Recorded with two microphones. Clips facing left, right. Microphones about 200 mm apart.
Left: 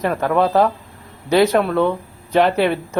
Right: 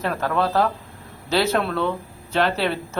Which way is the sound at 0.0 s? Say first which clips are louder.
Left 5 dB; 15° left (ahead or behind).